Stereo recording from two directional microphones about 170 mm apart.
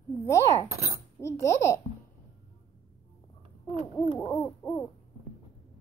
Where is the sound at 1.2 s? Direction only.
15° left (ahead or behind).